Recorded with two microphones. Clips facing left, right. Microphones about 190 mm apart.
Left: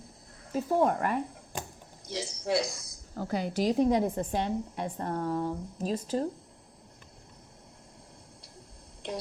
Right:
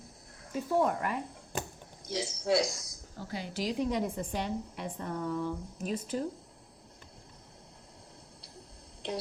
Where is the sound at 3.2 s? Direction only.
50° left (ahead or behind).